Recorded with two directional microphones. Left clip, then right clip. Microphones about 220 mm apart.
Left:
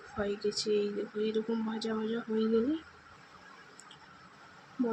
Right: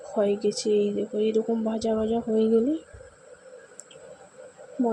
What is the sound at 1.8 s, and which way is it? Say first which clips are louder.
Speech: right 10 dB; 25° right (ahead or behind).